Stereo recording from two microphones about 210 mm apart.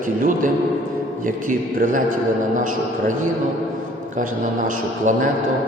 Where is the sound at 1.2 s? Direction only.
40° right (ahead or behind).